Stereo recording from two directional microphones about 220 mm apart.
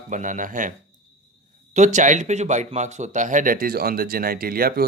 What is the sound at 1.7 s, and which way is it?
A man's voice, 35° right (ahead or behind).